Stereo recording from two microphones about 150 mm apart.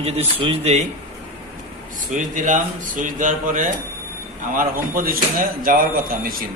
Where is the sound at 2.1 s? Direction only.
60° right (ahead or behind).